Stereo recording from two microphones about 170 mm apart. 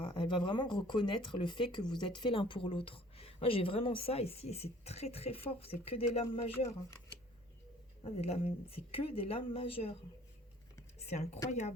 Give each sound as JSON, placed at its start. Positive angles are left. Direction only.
{"t": 0.0, "sound": "a woman's voice", "side_deg": 30}
{"t": 8.0, "sound": "a woman's voice", "side_deg": 35}
{"t": 11.0, "sound": "speech", "side_deg": 40}